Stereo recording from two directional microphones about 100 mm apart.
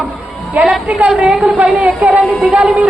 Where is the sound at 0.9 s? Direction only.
15° right (ahead or behind).